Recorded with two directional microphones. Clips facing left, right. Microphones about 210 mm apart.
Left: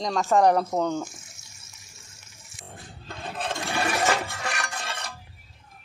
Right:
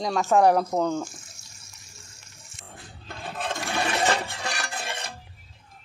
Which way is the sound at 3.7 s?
25° right (ahead or behind).